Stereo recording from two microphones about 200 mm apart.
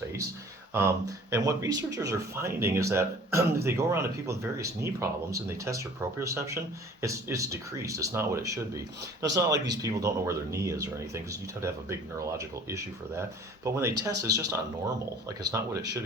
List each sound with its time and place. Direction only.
0.7 s speech: 15° right (ahead or behind)